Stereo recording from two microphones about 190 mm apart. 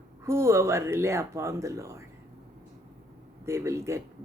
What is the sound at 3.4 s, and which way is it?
Speech, 15° right (ahead or behind).